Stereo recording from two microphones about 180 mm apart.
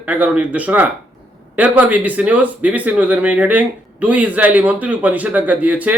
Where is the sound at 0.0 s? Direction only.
10° right (ahead or behind).